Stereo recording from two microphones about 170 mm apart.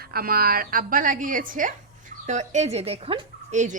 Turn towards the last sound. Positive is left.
turn(degrees=-45)  # may be behind; listen again after turning